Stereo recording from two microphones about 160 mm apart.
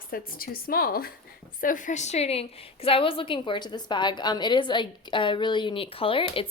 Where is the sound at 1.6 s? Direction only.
55° left (ahead or behind).